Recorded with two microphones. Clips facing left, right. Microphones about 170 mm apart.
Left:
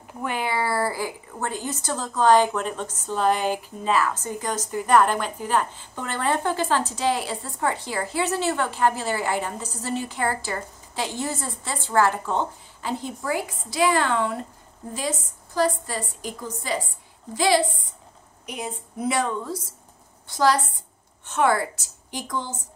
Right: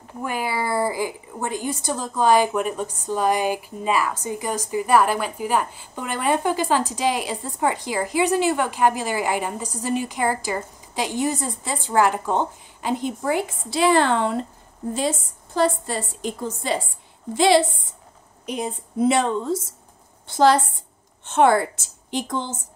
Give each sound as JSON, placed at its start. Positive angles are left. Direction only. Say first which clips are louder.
{"t": 0.2, "sound": "a woman's voice", "louder": "even", "side_deg": -10}